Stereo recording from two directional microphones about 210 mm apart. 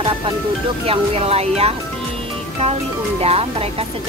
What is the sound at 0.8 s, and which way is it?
Speech, 30° right (ahead or behind).